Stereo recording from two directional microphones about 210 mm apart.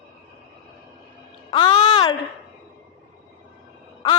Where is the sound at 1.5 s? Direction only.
25° left (ahead or behind).